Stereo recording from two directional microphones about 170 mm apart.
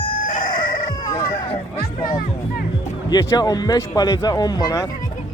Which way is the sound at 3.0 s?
25° left (ahead or behind).